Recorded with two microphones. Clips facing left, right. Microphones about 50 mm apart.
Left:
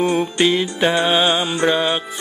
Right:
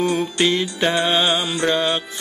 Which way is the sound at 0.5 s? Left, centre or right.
Centre.